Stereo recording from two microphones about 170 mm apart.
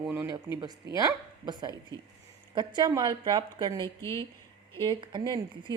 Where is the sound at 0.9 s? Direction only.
25° right (ahead or behind).